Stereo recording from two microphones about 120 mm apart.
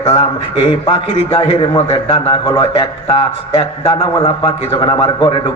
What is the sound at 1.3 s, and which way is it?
A man's voice, 45° left (ahead or behind).